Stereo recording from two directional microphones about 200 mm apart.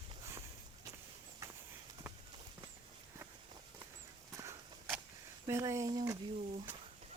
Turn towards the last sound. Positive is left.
turn(degrees=-15)  # may be behind; listen again after turning